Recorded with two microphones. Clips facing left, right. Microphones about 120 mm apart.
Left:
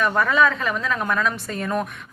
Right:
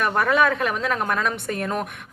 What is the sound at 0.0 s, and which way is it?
A woman's voice, 60° right (ahead or behind).